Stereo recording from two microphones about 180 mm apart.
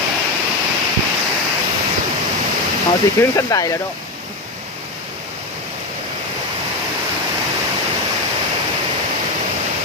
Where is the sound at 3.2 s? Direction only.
15° left (ahead or behind).